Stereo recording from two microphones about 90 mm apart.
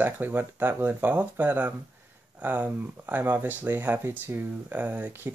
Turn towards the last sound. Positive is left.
turn(degrees=-20)  # may be behind; listen again after turning